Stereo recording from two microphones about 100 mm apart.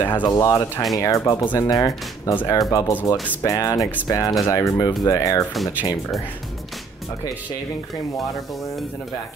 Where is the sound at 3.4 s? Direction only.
35° left (ahead or behind).